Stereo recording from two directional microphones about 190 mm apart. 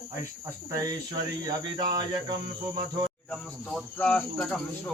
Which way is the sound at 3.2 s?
5° left (ahead or behind).